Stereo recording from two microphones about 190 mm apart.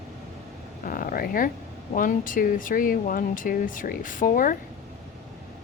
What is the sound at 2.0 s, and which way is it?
Speech, 45° left (ahead or behind).